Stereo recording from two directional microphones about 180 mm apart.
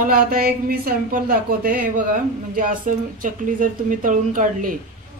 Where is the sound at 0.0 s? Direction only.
55° right (ahead or behind).